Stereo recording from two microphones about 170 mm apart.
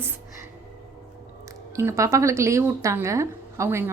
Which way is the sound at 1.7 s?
15° right (ahead or behind).